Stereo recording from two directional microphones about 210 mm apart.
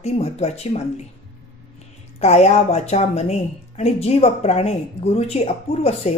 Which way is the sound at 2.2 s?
30° left (ahead or behind).